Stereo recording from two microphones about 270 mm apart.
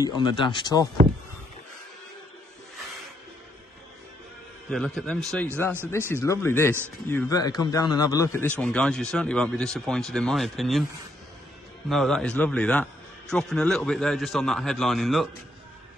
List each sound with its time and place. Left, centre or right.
0.0 s speech: centre
4.6 s a man's voice: centre
11.9 s a man's voice: centre